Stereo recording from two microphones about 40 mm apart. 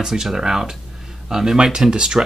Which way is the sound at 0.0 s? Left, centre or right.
Centre.